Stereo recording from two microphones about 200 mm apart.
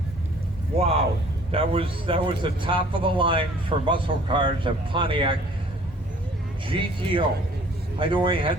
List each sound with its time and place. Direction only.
1.5 s a man's voice: 25° right (ahead or behind)
6.7 s a man's voice: 25° right (ahead or behind)